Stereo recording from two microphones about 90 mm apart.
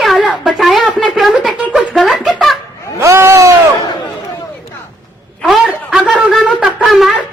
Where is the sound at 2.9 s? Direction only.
30° right (ahead or behind).